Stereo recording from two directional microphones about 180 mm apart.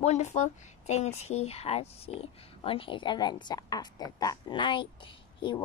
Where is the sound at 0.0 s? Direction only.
40° left (ahead or behind).